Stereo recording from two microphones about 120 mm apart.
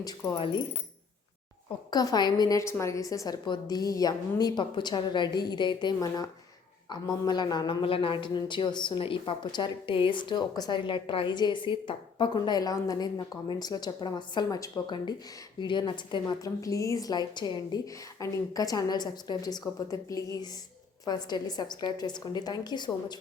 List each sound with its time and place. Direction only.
0.3 s speech: 45° left (ahead or behind)
1.9 s a woman's voice: 35° left (ahead or behind)